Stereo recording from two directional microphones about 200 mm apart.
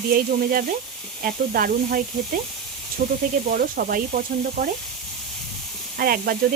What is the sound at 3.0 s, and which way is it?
Speech, 50° right (ahead or behind).